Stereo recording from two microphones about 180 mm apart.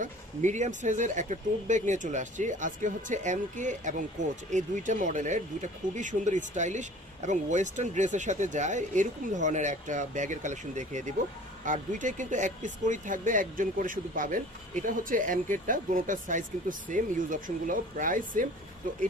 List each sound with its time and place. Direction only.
0.0 s speech: 40° right (ahead or behind)